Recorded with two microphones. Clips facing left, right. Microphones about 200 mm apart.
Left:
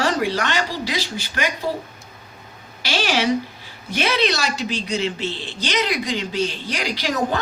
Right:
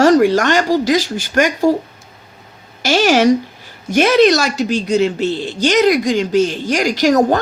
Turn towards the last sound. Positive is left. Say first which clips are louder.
# right 10 dB
turn(degrees=-45)  # may be behind; listen again after turning